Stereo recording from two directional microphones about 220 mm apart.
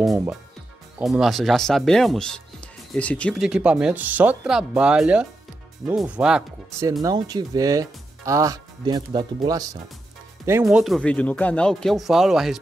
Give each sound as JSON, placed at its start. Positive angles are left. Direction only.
{"t": 0.9, "sound": "speech", "side_deg": -5}
{"t": 6.9, "sound": "speech", "side_deg": -15}